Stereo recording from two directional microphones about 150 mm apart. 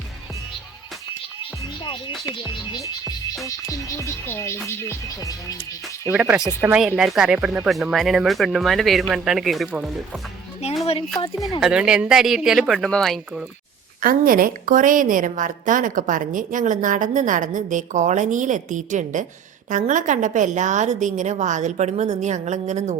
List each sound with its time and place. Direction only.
3.4 s music: 20° left (ahead or behind)
6.1 s speech: 10° right (ahead or behind)
11.6 s speech: 5° right (ahead or behind)
14.0 s a woman's voice: 70° right (ahead or behind); by 23.0 s 50° right (ahead or behind)